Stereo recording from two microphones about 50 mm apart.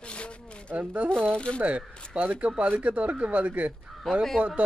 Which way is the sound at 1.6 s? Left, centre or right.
Right.